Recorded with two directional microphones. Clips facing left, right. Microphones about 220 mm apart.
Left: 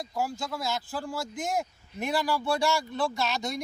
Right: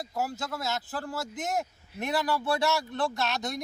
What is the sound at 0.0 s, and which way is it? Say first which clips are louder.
Speech: left 1 dB; 5° right (ahead or behind).